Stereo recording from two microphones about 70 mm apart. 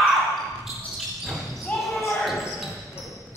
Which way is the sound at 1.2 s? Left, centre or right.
Centre.